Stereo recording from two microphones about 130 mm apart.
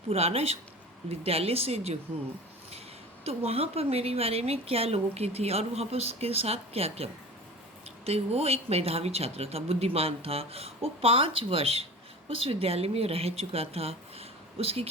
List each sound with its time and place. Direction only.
0.1 s a woman's voice: 50° right (ahead or behind)
3.2 s a woman's voice: 50° right (ahead or behind)